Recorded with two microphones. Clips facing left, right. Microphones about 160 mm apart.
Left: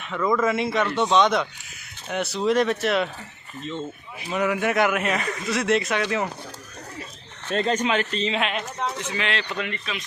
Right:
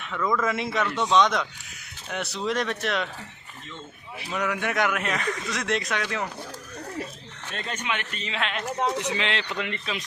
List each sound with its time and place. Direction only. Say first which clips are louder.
0.0 s a man's voice: left 4 dB; 5° left (ahead or behind)
3.6 s speech: left 11 dB; 20° left (ahead or behind)
4.3 s speech: left 5 dB; 5° left (ahead or behind)
7.5 s speech: left 10 dB; 35° left (ahead or behind)
8.8 s speech: right 4 dB; 20° right (ahead or behind)